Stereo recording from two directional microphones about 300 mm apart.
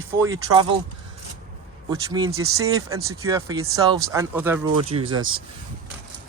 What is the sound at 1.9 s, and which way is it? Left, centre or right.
Speech, centre.